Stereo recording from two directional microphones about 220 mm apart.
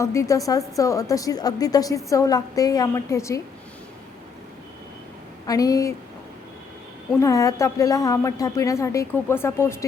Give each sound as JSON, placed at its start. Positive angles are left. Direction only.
{"t": 0.0, "sound": "a woman's voice", "side_deg": 15}
{"t": 5.5, "sound": "a woman's voice", "side_deg": 15}
{"t": 7.2, "sound": "a woman's voice", "side_deg": 15}